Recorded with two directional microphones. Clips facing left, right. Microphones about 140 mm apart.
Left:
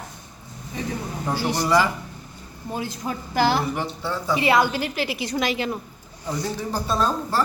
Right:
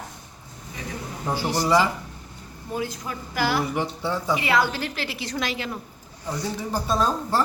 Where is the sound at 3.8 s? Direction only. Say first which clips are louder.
Right 1 dB; 15° right (ahead or behind).